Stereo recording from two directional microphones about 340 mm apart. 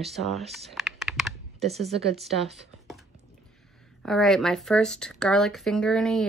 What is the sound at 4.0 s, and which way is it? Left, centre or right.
Speech, centre.